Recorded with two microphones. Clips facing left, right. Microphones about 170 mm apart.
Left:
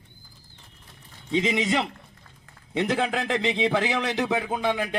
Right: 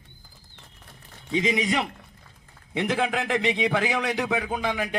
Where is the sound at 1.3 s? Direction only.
25° left (ahead or behind).